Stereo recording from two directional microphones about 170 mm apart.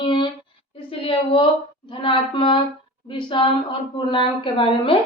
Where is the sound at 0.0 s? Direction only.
25° left (ahead or behind).